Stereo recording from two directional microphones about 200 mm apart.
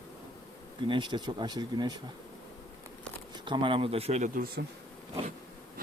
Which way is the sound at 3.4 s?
25° right (ahead or behind).